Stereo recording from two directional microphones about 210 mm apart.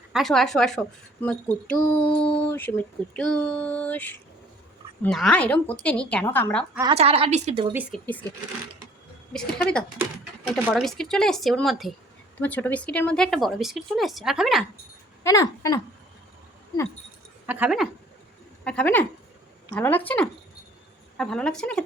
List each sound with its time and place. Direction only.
0.1 s speech: centre (ahead or behind)
6.9 s a woman's voice: 30° right (ahead or behind)
7.7 s speech: 10° right (ahead or behind)
7.9 s speech: 10° left (ahead or behind)
9.3 s speech: 5° left (ahead or behind)
15.2 s speech: 15° left (ahead or behind)
17.4 s speech: 10° right (ahead or behind)
18.6 s speech: 5° left (ahead or behind)